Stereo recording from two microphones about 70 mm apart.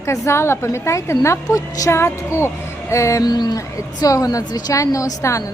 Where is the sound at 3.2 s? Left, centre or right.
Left.